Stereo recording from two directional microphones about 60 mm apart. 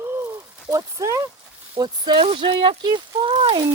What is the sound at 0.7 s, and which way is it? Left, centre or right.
Speech, right.